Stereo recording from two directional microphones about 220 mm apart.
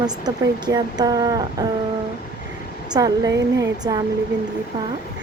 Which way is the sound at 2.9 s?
15° right (ahead or behind).